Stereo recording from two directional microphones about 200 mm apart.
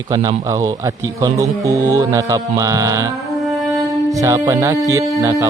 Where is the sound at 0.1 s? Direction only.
20° right (ahead or behind).